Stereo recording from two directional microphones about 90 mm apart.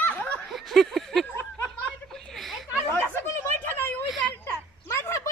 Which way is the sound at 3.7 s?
25° left (ahead or behind).